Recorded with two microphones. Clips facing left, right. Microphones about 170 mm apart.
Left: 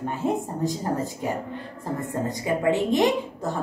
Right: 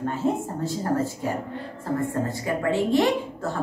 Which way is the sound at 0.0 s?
15° left (ahead or behind).